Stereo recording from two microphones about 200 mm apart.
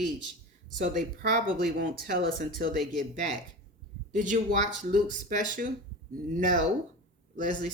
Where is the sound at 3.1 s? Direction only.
35° right (ahead or behind).